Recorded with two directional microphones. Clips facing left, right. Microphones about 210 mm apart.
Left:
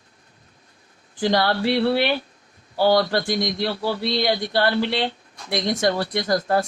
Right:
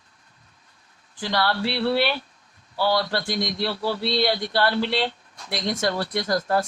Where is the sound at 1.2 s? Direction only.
45° left (ahead or behind).